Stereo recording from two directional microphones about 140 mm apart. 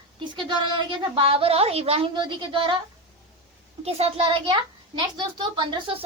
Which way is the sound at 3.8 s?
45° right (ahead or behind).